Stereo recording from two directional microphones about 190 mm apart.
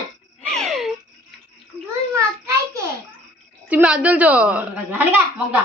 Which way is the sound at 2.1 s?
15° right (ahead or behind).